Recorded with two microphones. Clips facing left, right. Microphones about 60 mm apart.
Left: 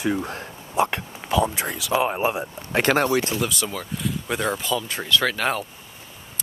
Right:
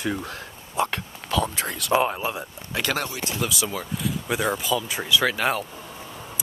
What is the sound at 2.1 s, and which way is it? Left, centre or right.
Speech, left.